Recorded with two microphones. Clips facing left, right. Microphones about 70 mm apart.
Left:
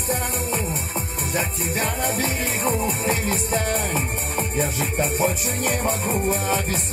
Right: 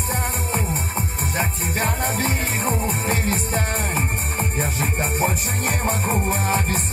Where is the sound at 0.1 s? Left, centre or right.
Right.